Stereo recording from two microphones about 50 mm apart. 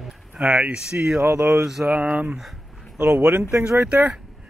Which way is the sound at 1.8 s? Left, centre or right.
Right.